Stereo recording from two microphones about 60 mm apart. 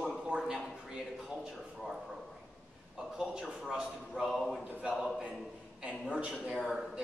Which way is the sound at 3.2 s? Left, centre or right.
Centre.